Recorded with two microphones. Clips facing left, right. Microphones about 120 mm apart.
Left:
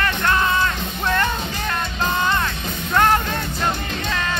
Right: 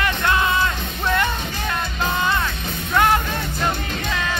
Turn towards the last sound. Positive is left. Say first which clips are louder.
# left 1 dB
turn(degrees=-5)  # may be behind; listen again after turning